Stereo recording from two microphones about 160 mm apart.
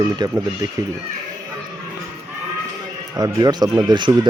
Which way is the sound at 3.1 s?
25° right (ahead or behind).